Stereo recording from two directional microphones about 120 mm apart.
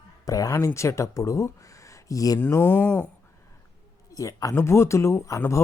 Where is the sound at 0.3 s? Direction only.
30° left (ahead or behind).